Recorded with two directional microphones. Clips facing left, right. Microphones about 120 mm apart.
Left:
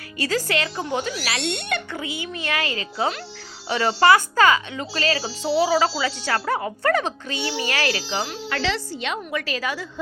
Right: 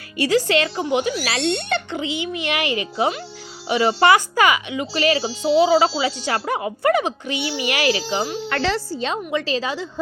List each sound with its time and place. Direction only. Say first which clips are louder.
0.2 s a child's voice: right 6 dB; 20° right (ahead or behind)
1.3 s a child's voice: right 4 dB; 30° right (ahead or behind); by 8.4 s 15° right (ahead or behind)
8.4 s speech: right 2 dB; 50° right (ahead or behind)
9.0 s a child's voice: right 4 dB; 30° right (ahead or behind)